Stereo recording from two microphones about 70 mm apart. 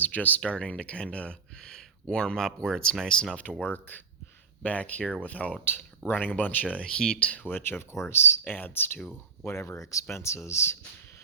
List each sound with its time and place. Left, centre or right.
0.0 s speech: left; by 3.2 s centre
3.6 s speech: left
5.7 s speech: left
6.7 s speech: centre
7.4 s speech: left
9.4 s speech: left